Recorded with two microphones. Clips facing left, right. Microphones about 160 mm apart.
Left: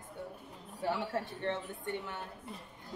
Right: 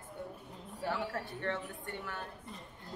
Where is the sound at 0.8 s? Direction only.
20° left (ahead or behind).